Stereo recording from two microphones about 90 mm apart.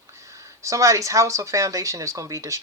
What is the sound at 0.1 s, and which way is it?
Speech, 35° right (ahead or behind).